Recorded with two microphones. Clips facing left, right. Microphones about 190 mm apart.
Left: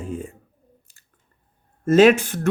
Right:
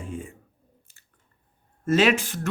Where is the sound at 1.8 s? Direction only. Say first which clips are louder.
Left 7 dB; 45° left (ahead or behind).